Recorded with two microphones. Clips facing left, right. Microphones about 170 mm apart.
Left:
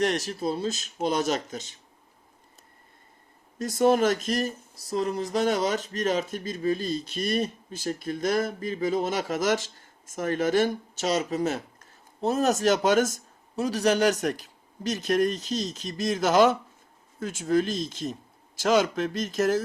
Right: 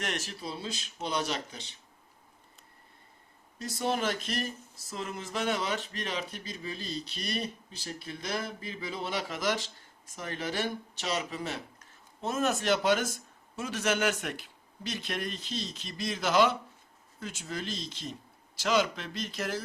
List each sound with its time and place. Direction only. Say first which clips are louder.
0.0 s speech: left 10 dB; 40° left (ahead or behind)
3.6 s speech: left 10 dB; 45° left (ahead or behind)